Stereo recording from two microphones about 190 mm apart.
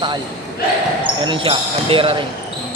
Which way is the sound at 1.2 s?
25° right (ahead or behind).